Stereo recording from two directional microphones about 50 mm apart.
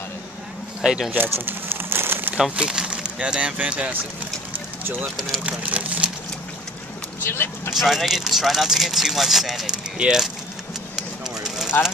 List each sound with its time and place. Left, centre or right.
0.8 s speech: centre
1.1 s crumpling: right
2.5 s speech: centre
5.4 s speech: right
7.2 s speech: left
7.7 s speech: centre
9.9 s speech: centre
11.0 s vehicle: centre